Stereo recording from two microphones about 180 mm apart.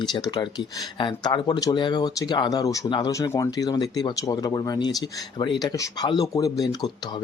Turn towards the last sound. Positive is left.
turn(degrees=20)  # may be behind; listen again after turning